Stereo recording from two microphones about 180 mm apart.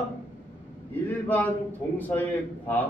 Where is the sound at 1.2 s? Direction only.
10° left (ahead or behind).